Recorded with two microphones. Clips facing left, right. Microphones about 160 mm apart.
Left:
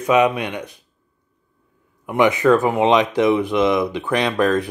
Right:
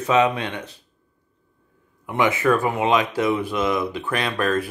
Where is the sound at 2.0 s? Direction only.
15° left (ahead or behind).